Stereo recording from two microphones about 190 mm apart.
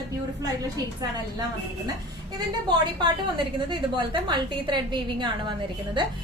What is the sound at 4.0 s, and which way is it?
A woman's voice, 25° right (ahead or behind).